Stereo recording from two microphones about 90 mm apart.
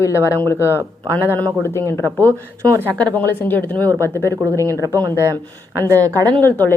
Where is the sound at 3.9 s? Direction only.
35° right (ahead or behind).